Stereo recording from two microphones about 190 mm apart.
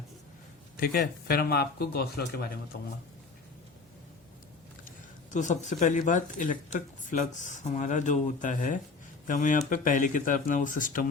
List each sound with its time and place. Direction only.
0.8 s speech: 55° left (ahead or behind)
4.9 s a sound: 40° left (ahead or behind)
5.8 s speech: 40° left (ahead or behind)